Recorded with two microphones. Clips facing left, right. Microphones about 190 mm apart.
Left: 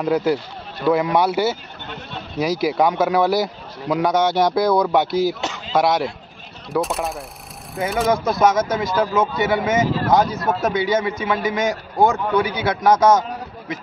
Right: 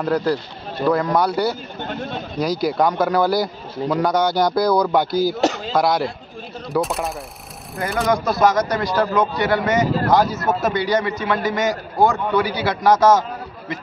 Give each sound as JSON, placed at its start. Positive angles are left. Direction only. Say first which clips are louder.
{"t": 0.0, "sound": "a man's voice", "louder": "left 1 dB", "side_deg": 5}
{"t": 1.8, "sound": "a sound", "louder": "right 7 dB", "side_deg": -45}
{"t": 2.3, "sound": "a man's voice", "louder": "left 1 dB", "side_deg": 5}